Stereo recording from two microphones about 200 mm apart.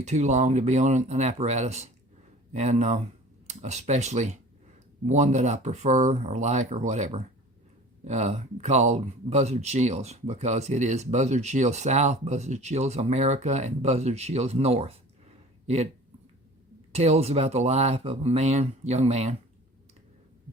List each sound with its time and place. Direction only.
0.0 s speech: 35° right (ahead or behind)
16.9 s speech: 30° right (ahead or behind)